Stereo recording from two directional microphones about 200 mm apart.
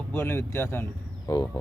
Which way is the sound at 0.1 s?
10° left (ahead or behind).